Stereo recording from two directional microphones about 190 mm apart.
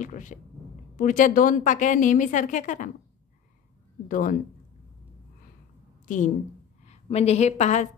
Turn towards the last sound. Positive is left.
turn(degrees=40)  # may be behind; listen again after turning